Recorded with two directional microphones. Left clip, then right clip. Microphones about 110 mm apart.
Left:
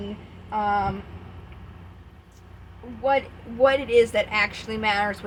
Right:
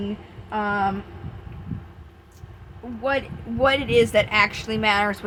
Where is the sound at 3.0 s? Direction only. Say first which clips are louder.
Left 2 dB; 60° right (ahead or behind).